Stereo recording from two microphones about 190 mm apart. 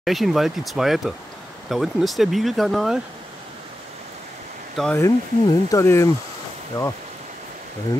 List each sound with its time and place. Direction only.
0.0 s speech: centre (ahead or behind)
4.7 s speech: 5° left (ahead or behind)
5.0 s speech: 15° left (ahead or behind)